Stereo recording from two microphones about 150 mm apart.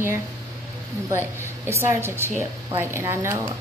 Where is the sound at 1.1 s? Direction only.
15° right (ahead or behind).